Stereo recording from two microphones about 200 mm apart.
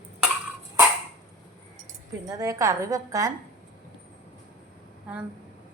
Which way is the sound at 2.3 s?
15° right (ahead or behind).